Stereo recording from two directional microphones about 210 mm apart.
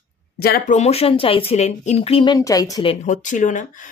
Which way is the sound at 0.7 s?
30° left (ahead or behind).